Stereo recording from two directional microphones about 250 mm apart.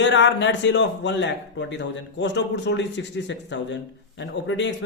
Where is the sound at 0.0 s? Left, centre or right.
Left.